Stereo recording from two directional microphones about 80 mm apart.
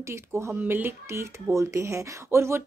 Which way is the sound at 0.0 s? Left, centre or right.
Right.